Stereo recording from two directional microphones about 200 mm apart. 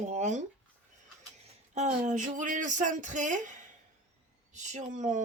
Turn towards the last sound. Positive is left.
turn(degrees=-40)  # may be behind; listen again after turning